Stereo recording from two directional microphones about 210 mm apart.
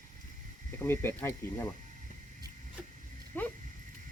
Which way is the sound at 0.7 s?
10° left (ahead or behind).